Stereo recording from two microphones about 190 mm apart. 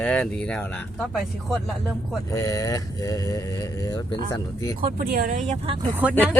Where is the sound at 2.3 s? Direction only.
15° left (ahead or behind).